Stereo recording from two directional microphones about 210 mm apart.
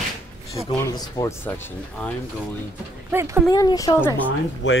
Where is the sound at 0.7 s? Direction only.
15° left (ahead or behind).